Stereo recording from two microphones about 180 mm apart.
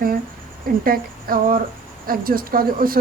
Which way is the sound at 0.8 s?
50° right (ahead or behind).